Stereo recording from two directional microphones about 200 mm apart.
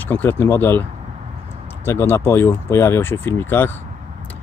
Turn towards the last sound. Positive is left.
turn(degrees=10)  # may be behind; listen again after turning